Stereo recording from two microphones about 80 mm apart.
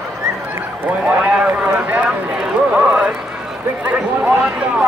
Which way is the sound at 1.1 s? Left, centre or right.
Centre.